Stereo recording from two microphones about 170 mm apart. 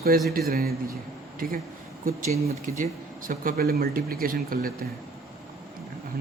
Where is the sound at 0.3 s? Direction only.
60° right (ahead or behind).